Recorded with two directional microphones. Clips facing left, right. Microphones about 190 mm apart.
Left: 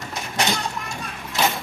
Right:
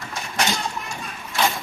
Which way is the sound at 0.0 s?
20° left (ahead or behind).